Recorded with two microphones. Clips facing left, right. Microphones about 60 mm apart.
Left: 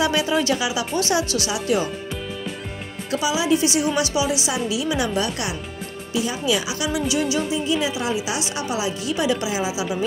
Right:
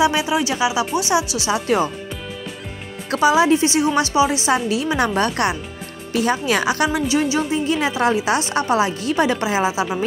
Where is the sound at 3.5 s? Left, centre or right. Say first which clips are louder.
Right 3 dB; right.